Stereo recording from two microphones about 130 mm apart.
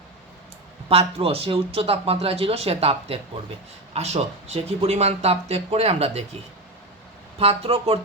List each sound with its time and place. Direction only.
0.9 s speech: 50° right (ahead or behind)
7.3 s speech: 50° right (ahead or behind)